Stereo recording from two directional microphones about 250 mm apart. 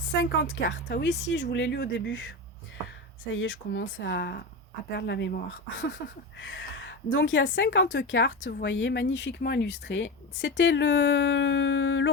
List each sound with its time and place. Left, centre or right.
0.2 s a woman's voice: left
8.4 s a woman's voice: left
8.6 s a woman's voice: left